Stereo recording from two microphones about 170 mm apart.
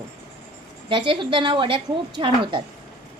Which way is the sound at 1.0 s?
30° right (ahead or behind).